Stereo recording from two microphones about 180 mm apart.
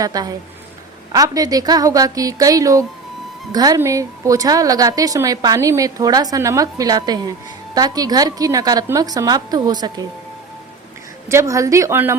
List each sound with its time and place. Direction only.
0.0 s a woman's voice: 20° right (ahead or behind)
11.3 s a woman's voice: 15° right (ahead or behind)